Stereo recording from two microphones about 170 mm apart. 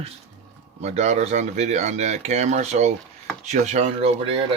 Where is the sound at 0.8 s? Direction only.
40° right (ahead or behind).